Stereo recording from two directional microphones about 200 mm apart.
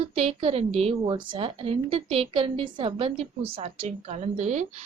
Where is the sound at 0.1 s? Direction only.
30° right (ahead or behind).